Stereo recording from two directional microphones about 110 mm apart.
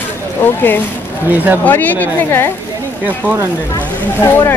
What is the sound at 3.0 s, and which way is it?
Speech, 15° right (ahead or behind).